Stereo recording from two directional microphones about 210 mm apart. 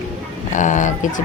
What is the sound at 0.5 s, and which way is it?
Speech, 35° left (ahead or behind).